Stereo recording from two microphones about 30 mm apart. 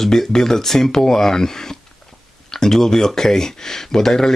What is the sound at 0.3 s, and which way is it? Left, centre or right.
Speech, centre.